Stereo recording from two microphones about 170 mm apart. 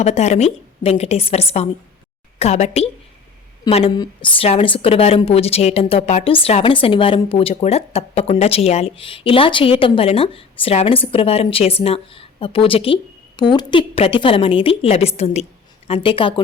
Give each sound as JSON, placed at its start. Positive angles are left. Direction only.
{"t": 0.0, "sound": "a woman's voice", "side_deg": 40}
{"t": 3.9, "sound": "a woman's voice", "side_deg": 25}